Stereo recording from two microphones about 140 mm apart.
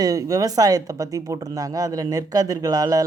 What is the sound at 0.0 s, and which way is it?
Speech, 25° right (ahead or behind).